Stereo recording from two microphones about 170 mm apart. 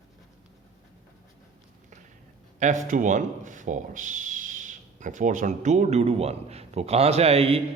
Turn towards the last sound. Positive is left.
turn(degrees=-35)  # may be behind; listen again after turning